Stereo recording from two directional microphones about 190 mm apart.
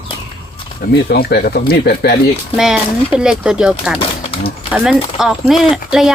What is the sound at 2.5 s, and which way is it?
Speech, 5° right (ahead or behind).